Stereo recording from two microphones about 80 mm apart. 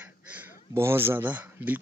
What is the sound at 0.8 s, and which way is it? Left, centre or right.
Speech, right.